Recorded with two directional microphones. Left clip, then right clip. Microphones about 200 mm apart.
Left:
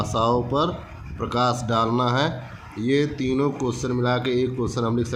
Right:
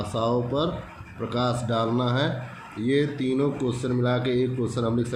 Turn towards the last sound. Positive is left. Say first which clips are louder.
# left 2 dB
turn(degrees=25)  # may be behind; listen again after turning